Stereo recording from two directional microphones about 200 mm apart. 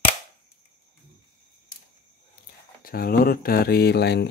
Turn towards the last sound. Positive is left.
turn(degrees=55)  # may be behind; listen again after turning